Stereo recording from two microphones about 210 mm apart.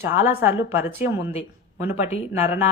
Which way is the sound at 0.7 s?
10° right (ahead or behind).